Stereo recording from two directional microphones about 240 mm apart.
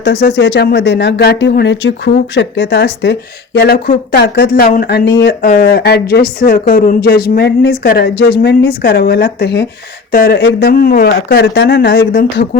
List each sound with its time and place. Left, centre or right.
0.0 s speech: left